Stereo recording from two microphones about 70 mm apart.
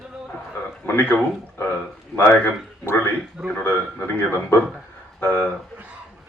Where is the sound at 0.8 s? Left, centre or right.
Left.